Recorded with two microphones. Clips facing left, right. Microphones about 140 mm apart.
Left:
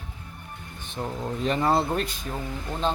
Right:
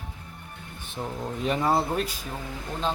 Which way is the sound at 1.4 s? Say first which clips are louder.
Left 1 dB; 5° right (ahead or behind).